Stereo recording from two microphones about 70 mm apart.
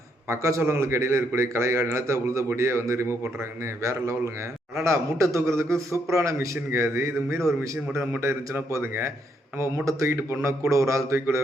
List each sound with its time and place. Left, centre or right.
0.3 s a man's voice: right